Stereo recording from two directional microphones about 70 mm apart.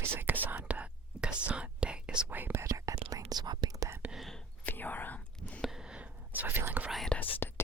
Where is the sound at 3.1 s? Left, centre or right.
Right.